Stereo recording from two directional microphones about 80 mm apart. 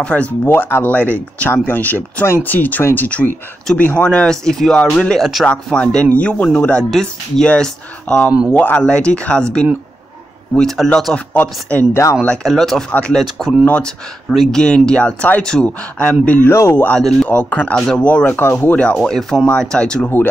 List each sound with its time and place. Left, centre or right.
0.0 s speech: centre
3.7 s speech: centre
11.9 s speech: left
12.4 s speech: centre
13.7 s speech: centre
14.3 s speech: centre
14.6 s speech: centre
16.4 s speech: left
17.3 s speech: centre
17.7 s speech: centre
18.0 s speech: centre
18.9 s speech: centre